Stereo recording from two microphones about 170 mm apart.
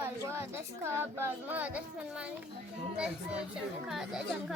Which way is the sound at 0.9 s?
15° right (ahead or behind).